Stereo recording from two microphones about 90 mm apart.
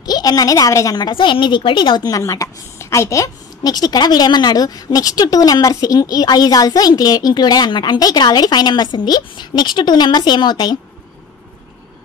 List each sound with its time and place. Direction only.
0.0 s a woman's voice: 45° left (ahead or behind)
1.0 s a woman's voice: 65° left (ahead or behind)
2.0 s a woman's voice: 40° left (ahead or behind)